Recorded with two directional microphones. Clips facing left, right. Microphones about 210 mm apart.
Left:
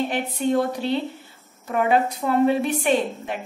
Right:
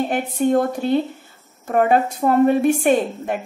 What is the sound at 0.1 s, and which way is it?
A woman's voice, 50° right (ahead or behind).